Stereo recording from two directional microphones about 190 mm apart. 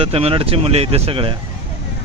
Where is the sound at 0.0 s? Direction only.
30° right (ahead or behind).